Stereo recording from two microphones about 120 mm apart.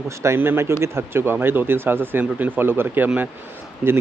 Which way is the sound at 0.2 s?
20° right (ahead or behind).